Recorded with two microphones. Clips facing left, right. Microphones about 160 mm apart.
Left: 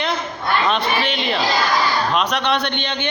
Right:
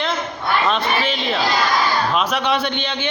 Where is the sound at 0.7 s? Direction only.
Centre (ahead or behind).